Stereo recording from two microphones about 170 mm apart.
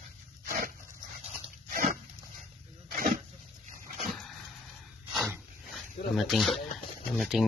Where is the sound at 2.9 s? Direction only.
55° right (ahead or behind).